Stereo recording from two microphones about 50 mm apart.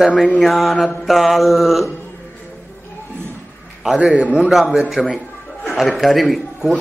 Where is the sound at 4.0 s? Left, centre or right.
Right.